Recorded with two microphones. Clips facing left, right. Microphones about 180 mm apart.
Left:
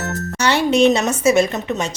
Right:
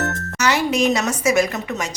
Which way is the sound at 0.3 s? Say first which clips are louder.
Left 4 dB; 30° left (ahead or behind).